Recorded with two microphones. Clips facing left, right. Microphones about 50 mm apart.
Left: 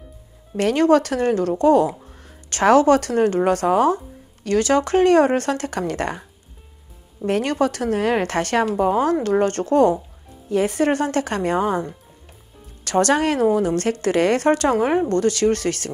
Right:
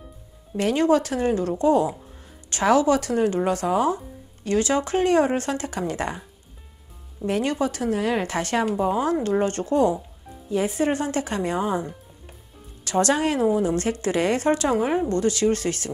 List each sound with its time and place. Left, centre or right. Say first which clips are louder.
0.6 s a woman's voice: left 4 dB; left
7.2 s a woman's voice: left 4 dB; left